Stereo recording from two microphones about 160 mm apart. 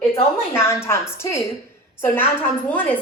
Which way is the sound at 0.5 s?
15° left (ahead or behind).